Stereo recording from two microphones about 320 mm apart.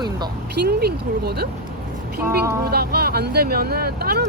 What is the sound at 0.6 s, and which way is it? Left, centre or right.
Speech, right.